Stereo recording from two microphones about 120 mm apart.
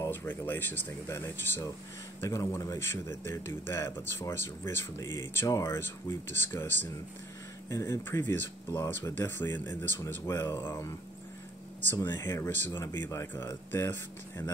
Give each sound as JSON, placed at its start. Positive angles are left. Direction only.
{"t": 0.0, "sound": "speech", "side_deg": 20}